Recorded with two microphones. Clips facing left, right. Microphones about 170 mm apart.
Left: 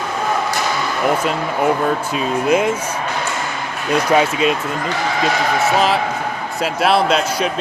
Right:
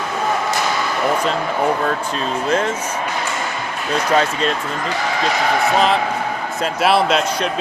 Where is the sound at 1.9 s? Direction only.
10° left (ahead or behind).